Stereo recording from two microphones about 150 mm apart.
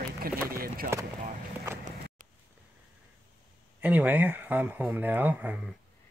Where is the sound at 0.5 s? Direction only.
75° right (ahead or behind).